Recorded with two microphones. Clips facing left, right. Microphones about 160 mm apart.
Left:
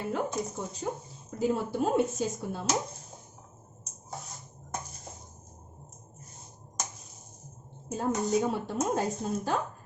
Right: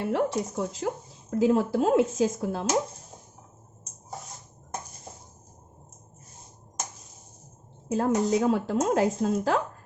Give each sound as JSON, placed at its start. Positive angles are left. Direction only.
{"t": 0.0, "sound": "speech", "side_deg": -70}
{"t": 7.9, "sound": "speech", "side_deg": -90}